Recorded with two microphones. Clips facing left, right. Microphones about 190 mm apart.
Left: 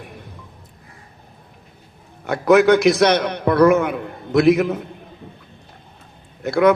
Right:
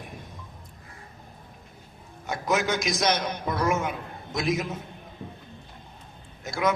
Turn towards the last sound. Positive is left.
turn(degrees=65)  # may be behind; listen again after turning